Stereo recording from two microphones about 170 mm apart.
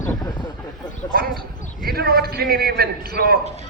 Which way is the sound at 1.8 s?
65° right (ahead or behind).